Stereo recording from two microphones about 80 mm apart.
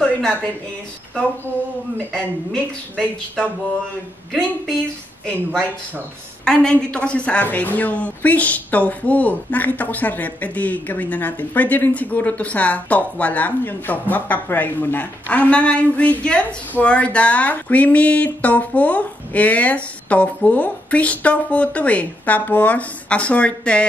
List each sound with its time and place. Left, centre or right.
0.0 s a sound: centre
2.5 s a woman's voice: centre
5.2 s a woman's voice: centre